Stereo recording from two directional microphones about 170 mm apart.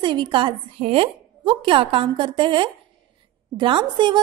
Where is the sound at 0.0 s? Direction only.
30° right (ahead or behind).